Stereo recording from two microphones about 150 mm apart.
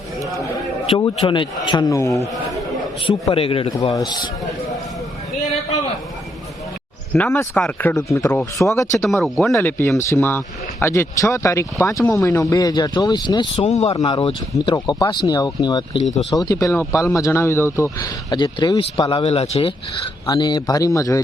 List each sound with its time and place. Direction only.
0.9 s speech: 35° left (ahead or behind)
3.1 s speech: 40° left (ahead or behind)
5.4 s a sound: 45° left (ahead or behind)
7.3 s speech: 15° left (ahead or behind); by 13.7 s 30° left (ahead or behind)
13.7 s speech: 45° left (ahead or behind)
20.2 s speech: 30° left (ahead or behind)